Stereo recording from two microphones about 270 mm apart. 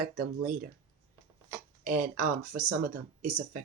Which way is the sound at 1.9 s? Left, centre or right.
Right.